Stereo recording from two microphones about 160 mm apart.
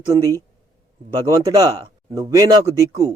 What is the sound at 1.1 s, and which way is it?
Speech, 20° right (ahead or behind).